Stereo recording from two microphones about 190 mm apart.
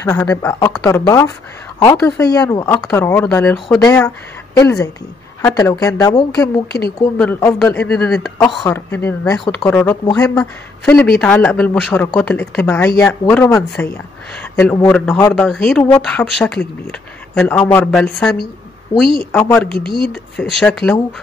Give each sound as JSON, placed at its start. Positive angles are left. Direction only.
{"t": 0.0, "sound": "speech", "side_deg": 10}